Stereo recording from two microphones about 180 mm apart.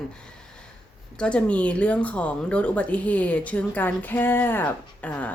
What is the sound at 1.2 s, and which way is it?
Speech, 5° left (ahead or behind).